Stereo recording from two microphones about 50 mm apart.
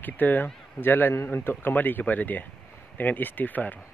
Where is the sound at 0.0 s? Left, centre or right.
Left.